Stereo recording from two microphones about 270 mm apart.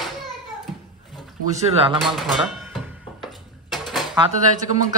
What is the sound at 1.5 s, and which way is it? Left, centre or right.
Speech, right.